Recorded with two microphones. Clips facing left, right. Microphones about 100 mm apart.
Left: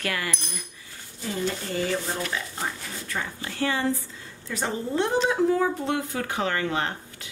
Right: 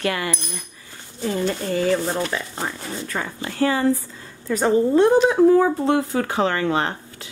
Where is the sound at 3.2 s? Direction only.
75° right (ahead or behind).